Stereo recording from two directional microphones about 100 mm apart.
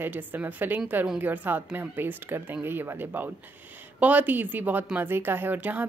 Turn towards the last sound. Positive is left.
turn(degrees=-15)  # may be behind; listen again after turning